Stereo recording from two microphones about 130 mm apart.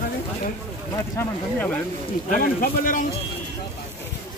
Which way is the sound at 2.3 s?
90° left.